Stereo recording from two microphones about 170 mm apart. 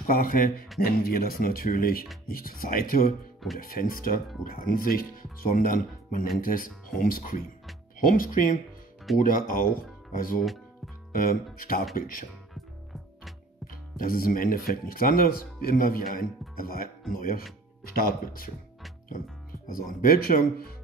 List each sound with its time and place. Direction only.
0.0 s speech: 55° left (ahead or behind)
11.9 s speech: 55° left (ahead or behind)
13.9 s speech: 60° left (ahead or behind)
19.7 s speech: 55° left (ahead or behind)